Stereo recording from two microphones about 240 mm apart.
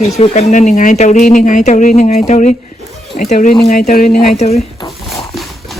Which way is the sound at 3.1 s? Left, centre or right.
Left.